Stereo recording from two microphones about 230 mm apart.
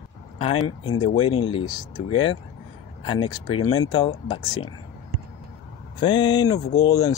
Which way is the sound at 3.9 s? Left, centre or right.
Centre.